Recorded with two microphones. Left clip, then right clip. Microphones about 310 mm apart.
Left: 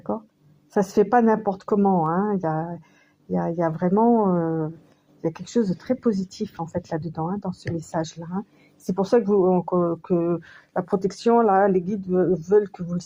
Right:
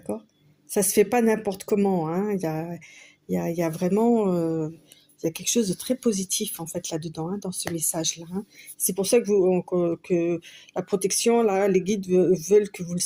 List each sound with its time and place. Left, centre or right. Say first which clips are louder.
0.7 s speech: left 2 dB; right